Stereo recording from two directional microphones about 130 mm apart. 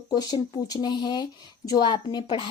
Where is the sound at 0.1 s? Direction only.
30° left (ahead or behind).